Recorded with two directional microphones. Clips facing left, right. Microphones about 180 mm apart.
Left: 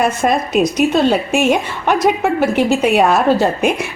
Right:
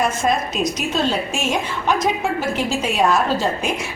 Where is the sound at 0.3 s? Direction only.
60° left (ahead or behind).